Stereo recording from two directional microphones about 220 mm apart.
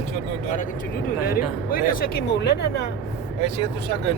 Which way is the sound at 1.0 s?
40° left (ahead or behind).